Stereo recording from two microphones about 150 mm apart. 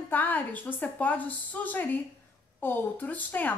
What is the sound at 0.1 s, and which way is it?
A woman's voice, 10° left (ahead or behind).